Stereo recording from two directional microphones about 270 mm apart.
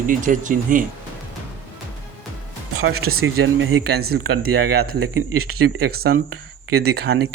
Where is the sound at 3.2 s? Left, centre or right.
Right.